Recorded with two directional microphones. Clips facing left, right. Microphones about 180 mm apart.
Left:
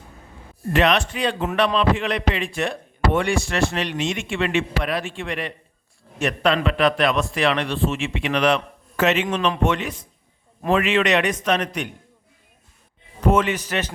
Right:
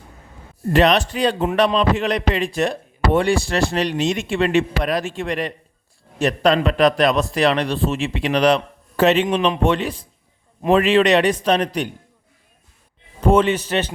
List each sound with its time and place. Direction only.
0.7 s a man's voice: 35° right (ahead or behind)
13.2 s a man's voice: 30° right (ahead or behind)